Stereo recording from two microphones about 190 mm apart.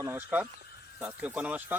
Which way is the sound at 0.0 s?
10° right (ahead or behind).